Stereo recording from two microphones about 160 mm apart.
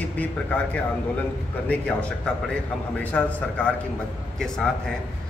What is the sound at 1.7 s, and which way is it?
A man's voice, 10° left (ahead or behind).